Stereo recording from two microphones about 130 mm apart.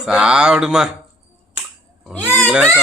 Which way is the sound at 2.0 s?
10° left (ahead or behind).